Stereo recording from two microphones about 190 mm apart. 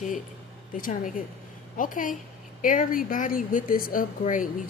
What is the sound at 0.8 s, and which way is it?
Speech, 45° left (ahead or behind).